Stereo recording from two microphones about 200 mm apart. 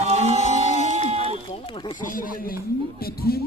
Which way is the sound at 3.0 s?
50° left (ahead or behind).